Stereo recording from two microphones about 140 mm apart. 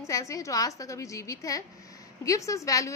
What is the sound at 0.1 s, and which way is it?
A woman's voice, 25° left (ahead or behind).